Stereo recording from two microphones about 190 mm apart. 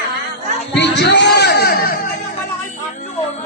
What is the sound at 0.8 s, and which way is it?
Chatter, 65° left (ahead or behind).